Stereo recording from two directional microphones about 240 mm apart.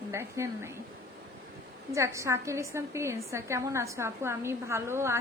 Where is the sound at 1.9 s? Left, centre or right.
Centre.